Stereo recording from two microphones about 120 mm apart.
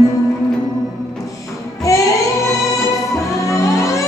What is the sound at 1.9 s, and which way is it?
Music, 25° left (ahead or behind).